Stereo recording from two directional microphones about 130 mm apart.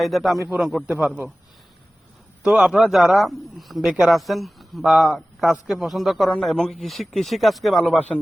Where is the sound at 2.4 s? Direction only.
10° right (ahead or behind).